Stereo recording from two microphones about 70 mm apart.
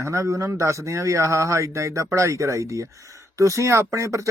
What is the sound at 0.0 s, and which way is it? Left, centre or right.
Speech, right.